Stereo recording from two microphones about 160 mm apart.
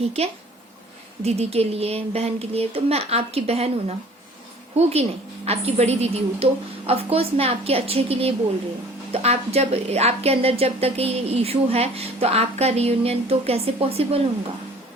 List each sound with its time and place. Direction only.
1.2 s a woman's voice: 40° right (ahead or behind)